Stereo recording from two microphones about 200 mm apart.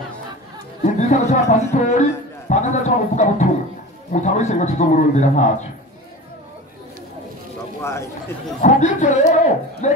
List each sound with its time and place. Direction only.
0.8 s a man's voice: 35° left (ahead or behind)
2.5 s a sound: 35° left (ahead or behind)
4.1 s speech: 35° left (ahead or behind)
7.8 s speech: 15° left (ahead or behind)
8.6 s a man's voice: 40° left (ahead or behind)